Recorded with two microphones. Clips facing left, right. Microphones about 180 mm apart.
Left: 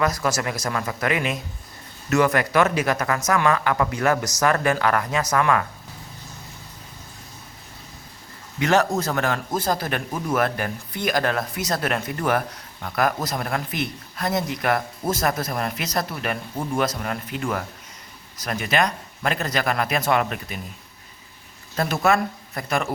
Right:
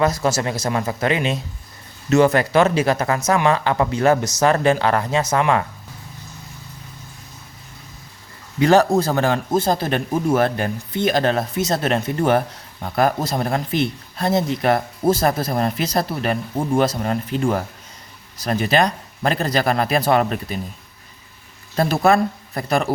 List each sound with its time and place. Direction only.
0.0 s speech: 25° right (ahead or behind)
8.5 s speech: 35° right (ahead or behind)
21.8 s speech: 35° right (ahead or behind)